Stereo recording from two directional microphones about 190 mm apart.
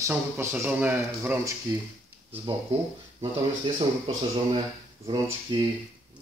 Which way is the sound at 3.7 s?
25° right (ahead or behind).